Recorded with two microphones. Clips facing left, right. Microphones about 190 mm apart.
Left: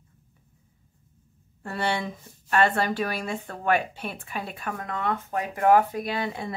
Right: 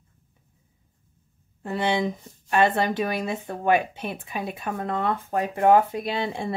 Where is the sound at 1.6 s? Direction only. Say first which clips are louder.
Right 4 dB; 15° right (ahead or behind).